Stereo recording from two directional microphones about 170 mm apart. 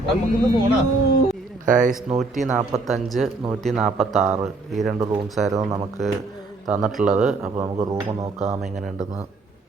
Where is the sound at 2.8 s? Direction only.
Centre (ahead or behind).